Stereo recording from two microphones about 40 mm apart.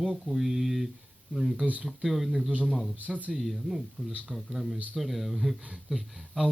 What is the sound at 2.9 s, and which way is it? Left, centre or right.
Speech, right.